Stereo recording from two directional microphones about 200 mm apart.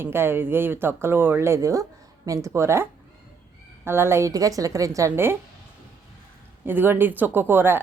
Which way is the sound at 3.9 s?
10° right (ahead or behind).